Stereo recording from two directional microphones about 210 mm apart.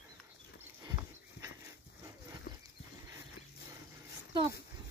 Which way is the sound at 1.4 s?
50° left (ahead or behind).